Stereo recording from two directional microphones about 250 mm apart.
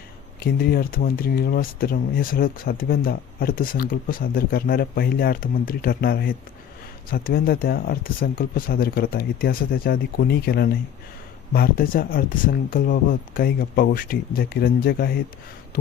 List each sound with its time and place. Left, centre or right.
0.3 s speech: left